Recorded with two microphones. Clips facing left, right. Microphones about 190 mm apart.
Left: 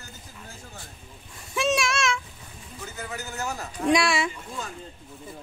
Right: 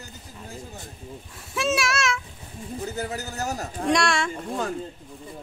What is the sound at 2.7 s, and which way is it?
Speech, 35° right (ahead or behind).